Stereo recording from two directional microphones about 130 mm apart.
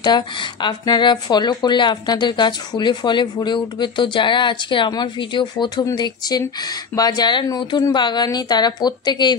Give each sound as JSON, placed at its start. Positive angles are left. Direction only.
{"t": 0.0, "sound": "speech", "side_deg": 35}